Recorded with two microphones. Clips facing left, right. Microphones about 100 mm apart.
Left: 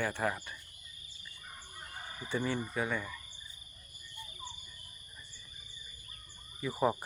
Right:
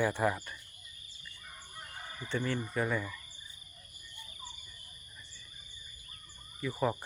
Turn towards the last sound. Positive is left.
turn(degrees=15)  # may be behind; listen again after turning